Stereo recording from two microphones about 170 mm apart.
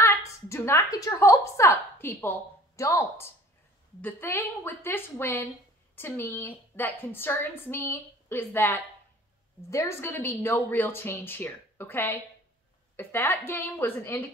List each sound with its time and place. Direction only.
0.5 s a woman's voice: 15° left (ahead or behind)